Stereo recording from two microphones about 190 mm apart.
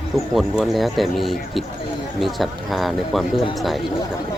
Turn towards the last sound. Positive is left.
turn(degrees=0)  # may be behind; listen again after turning